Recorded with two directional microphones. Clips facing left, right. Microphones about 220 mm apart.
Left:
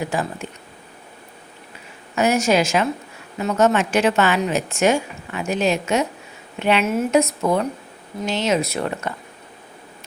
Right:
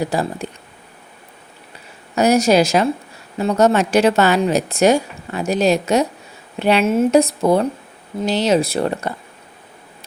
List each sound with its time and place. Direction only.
0.0 s a woman's voice: 35° right (ahead or behind)
2.1 s a woman's voice: 35° right (ahead or behind)